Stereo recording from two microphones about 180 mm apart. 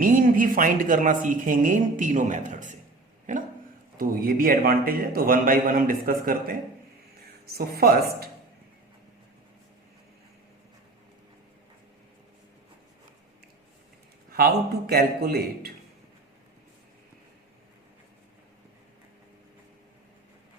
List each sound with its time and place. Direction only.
0.0 s a man's voice: 50° right (ahead or behind)
14.3 s a man's voice: 60° right (ahead or behind)